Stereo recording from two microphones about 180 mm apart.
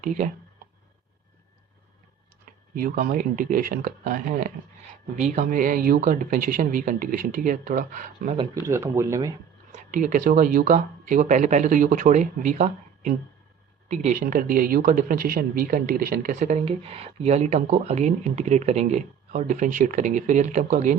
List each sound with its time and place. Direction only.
0.0 s speech: 45° right (ahead or behind)
2.7 s speech: 50° right (ahead or behind)
8.6 s speech: 15° right (ahead or behind)
9.7 s speech: 45° right (ahead or behind)